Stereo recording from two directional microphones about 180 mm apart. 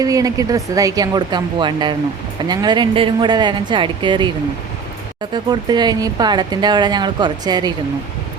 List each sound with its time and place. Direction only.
0.0 s speech: 20° right (ahead or behind)
5.3 s speech: 25° right (ahead or behind)